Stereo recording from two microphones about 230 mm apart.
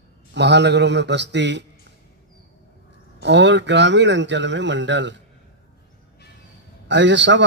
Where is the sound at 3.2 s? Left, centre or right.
Right.